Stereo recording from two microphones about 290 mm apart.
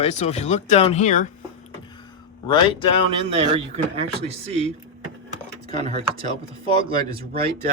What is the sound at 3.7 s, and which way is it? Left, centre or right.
Speech, right.